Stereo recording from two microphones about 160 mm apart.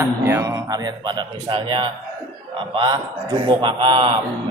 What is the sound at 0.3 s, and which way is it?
A man's voice, 20° right (ahead or behind).